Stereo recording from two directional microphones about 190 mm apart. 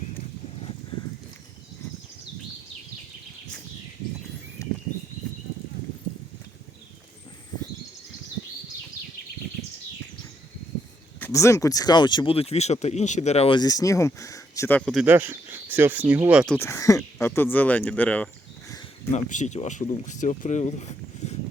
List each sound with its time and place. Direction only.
11.2 s speech: 15° left (ahead or behind)
15.0 s speech: 10° right (ahead or behind)
16.6 s speech: 15° left (ahead or behind)
19.1 s speech: 40° left (ahead or behind)